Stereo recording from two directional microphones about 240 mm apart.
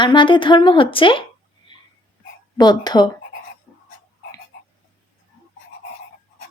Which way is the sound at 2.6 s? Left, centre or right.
Centre.